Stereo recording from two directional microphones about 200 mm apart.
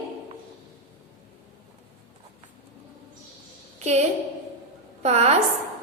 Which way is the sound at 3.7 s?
35° right (ahead or behind).